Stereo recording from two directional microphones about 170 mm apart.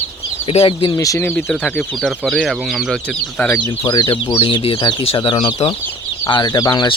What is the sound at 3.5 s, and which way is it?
Speech, 25° left (ahead or behind).